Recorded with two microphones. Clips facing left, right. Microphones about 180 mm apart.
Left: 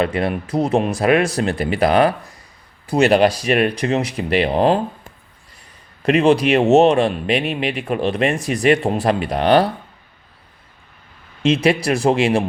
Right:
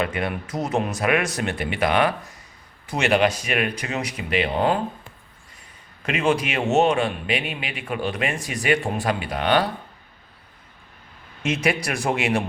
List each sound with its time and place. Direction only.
0.0 s speech: 30° left (ahead or behind)
6.1 s speech: 35° left (ahead or behind)
11.4 s speech: 30° left (ahead or behind)